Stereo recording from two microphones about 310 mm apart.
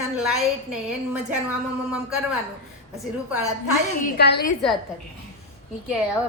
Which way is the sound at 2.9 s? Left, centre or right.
Centre.